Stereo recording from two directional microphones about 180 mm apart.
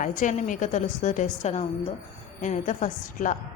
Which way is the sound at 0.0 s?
45° left (ahead or behind).